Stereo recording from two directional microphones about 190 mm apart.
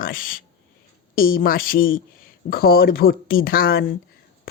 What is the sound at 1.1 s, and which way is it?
Speech, 50° left (ahead or behind).